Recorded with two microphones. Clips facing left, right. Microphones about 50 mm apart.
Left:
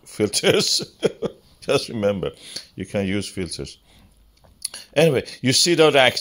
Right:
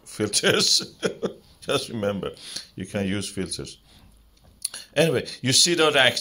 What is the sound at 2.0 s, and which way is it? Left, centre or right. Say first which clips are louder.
Speech: left 5 dB; left.